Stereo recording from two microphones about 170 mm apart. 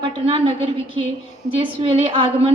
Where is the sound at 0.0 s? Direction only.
35° right (ahead or behind).